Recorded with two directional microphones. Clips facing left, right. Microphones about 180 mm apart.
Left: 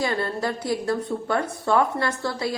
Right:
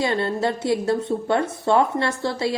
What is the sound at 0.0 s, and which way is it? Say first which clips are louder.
A woman's voice: right 3 dB; 25° right (ahead or behind).